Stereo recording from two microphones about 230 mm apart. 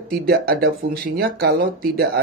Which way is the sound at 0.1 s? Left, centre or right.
Right.